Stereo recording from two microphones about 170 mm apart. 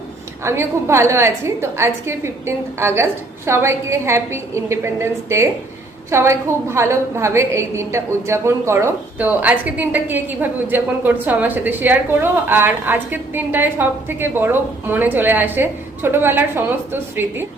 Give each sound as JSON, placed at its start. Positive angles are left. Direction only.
{"t": 0.4, "sound": "a woman's voice", "side_deg": -15}